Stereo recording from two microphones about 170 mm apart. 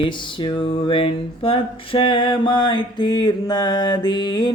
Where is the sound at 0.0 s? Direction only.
30° left (ahead or behind).